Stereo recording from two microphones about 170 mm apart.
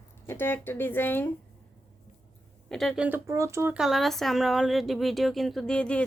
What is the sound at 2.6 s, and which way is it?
Speech, centre (ahead or behind).